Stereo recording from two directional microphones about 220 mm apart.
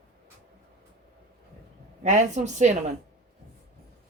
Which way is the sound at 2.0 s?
35° right (ahead or behind).